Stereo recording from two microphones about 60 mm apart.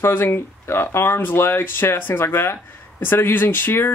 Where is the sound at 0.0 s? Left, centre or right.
Left.